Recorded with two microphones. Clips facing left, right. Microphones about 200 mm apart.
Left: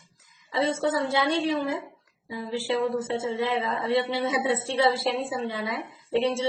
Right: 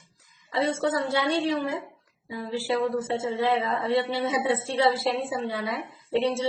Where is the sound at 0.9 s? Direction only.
20° left (ahead or behind).